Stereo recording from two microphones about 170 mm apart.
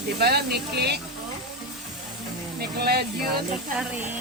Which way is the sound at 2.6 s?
65° right (ahead or behind).